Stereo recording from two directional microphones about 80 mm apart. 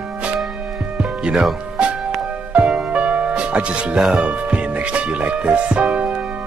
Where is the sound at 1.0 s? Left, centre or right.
Centre.